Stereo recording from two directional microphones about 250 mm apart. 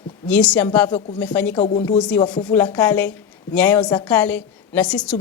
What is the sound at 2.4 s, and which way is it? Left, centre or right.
Speech, centre.